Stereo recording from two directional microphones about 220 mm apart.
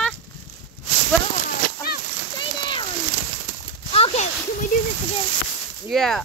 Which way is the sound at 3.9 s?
25° left (ahead or behind).